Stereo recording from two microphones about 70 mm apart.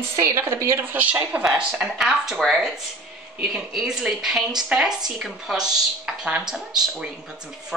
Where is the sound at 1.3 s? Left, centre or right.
Right.